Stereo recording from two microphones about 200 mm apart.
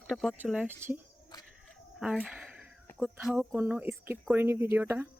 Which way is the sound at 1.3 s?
20° left (ahead or behind).